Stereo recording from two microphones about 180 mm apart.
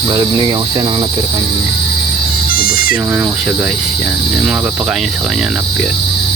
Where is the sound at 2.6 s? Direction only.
55° left (ahead or behind).